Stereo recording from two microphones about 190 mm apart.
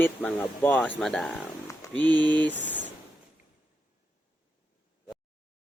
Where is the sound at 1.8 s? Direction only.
15° left (ahead or behind).